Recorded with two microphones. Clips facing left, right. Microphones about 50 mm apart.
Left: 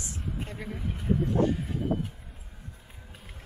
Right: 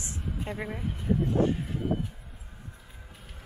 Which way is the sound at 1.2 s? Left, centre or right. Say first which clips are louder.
Even; right.